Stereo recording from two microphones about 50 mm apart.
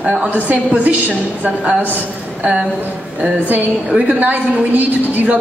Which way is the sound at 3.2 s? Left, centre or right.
Right.